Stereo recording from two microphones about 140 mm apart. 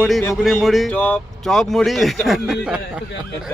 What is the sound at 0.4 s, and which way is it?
Speech, centre (ahead or behind).